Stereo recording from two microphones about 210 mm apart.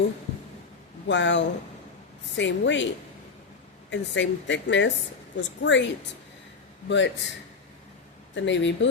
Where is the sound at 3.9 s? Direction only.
60° left (ahead or behind).